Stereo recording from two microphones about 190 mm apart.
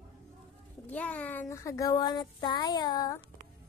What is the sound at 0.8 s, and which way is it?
Speech, 10° left (ahead or behind).